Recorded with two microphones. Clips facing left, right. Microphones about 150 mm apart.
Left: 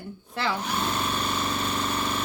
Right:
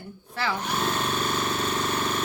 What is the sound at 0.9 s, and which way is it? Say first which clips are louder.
Vehicle: right 1 dB; 5° left (ahead or behind).